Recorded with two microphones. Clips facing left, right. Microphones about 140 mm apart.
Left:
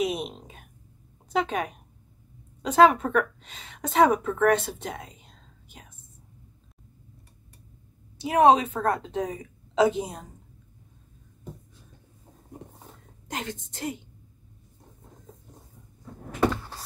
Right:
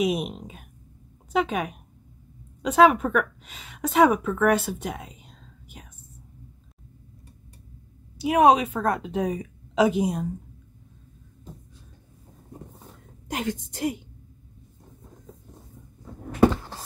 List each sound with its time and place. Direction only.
0.0 s a woman's voice: 10° right (ahead or behind)
8.2 s a woman's voice: 15° right (ahead or behind)
13.3 s a woman's voice: 15° right (ahead or behind)